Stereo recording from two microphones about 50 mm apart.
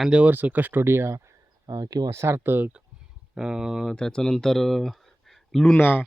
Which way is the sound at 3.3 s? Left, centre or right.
Centre.